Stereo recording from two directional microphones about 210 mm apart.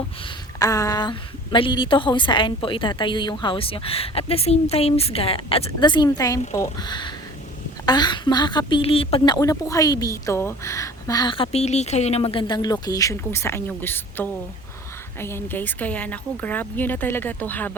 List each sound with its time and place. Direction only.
0.6 s speech: 15° left (ahead or behind)